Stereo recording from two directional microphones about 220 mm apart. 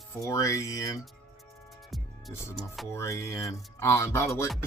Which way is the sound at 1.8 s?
Centre (ahead or behind).